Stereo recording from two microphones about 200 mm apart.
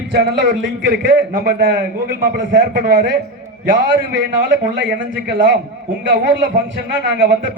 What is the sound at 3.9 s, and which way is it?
A man's voice, 65° right (ahead or behind).